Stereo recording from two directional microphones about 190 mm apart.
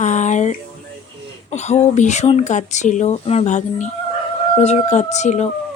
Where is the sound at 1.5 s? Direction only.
35° left (ahead or behind).